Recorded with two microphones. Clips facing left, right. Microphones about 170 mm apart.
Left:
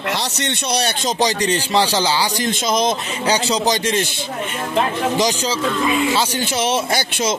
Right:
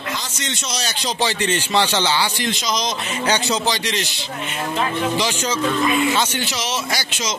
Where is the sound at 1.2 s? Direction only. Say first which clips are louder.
Left 3 dB; 35° left (ahead or behind).